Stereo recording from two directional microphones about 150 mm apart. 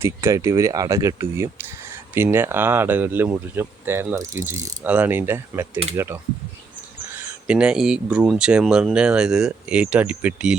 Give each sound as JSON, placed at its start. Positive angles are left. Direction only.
{"t": 0.0, "sound": "speech", "side_deg": -20}
{"t": 7.1, "sound": "speech", "side_deg": -10}